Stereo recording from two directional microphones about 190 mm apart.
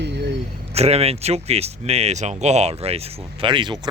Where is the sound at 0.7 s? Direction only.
35° right (ahead or behind).